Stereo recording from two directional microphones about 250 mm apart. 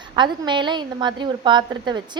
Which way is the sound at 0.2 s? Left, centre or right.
Centre.